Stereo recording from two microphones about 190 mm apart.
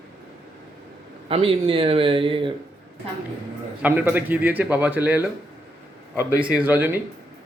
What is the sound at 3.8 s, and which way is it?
A man's voice, 10° right (ahead or behind).